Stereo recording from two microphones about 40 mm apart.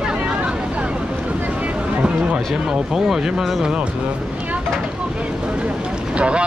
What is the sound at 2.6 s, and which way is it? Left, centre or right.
Speech, centre.